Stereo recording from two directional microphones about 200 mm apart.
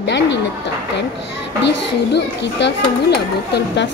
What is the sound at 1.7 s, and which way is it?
Speech, 60° left (ahead or behind).